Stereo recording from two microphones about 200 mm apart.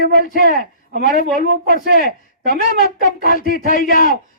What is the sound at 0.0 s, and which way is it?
A man's voice, 45° left (ahead or behind).